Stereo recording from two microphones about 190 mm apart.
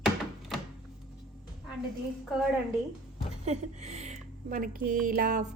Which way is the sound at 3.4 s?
35° right (ahead or behind).